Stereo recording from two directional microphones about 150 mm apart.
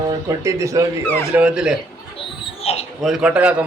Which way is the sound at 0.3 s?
20° right (ahead or behind).